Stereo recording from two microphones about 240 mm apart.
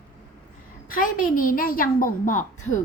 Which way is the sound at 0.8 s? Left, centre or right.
Left.